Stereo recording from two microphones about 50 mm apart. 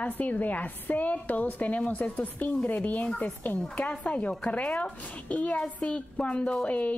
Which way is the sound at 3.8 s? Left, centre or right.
Left.